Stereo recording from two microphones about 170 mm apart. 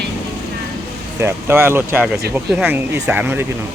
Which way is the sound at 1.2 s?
15° right (ahead or behind).